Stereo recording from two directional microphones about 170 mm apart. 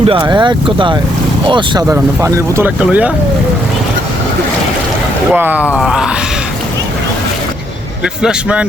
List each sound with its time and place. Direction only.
0.0 s speech: 30° right (ahead or behind); by 3.1 s 10° right (ahead or behind)
5.3 s speech: 10° right (ahead or behind)
8.0 s speech: 5° right (ahead or behind)